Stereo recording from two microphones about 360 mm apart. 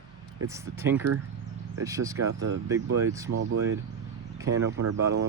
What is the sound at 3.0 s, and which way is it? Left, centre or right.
Speech, centre.